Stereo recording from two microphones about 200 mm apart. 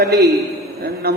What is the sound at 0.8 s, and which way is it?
Speech, 50° right (ahead or behind).